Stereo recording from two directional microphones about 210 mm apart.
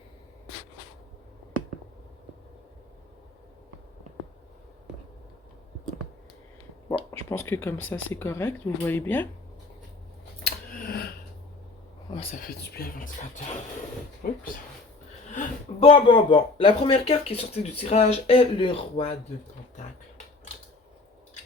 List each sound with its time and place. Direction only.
6.8 s a sound: 15° left (ahead or behind)
7.3 s speech: 10° left (ahead or behind)
10.4 s scissors: 45° left (ahead or behind)
12.4 s speech: 45° left (ahead or behind)
14.2 s speech: 40° left (ahead or behind)
15.3 s speech: 30° left (ahead or behind)